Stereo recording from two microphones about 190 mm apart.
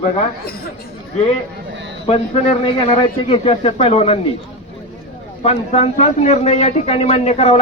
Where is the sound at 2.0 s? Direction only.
30° left (ahead or behind).